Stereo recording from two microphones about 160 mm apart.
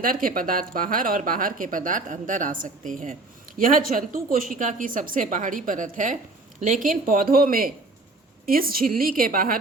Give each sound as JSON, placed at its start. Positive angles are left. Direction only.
{"t": 0.0, "sound": "speech", "side_deg": -60}